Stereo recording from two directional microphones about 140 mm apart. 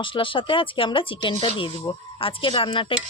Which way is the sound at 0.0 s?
35° left (ahead or behind).